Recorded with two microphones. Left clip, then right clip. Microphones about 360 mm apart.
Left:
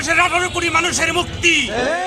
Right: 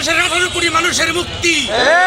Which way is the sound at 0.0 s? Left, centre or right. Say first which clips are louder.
Right 1 dB; centre.